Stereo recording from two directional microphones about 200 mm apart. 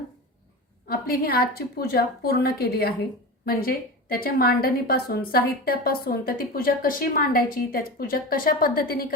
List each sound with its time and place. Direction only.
0.9 s a woman's voice: 50° left (ahead or behind)